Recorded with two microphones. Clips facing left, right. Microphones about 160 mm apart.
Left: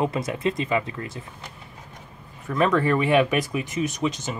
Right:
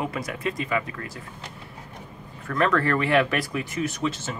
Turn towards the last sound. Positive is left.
turn(degrees=15)  # may be behind; listen again after turning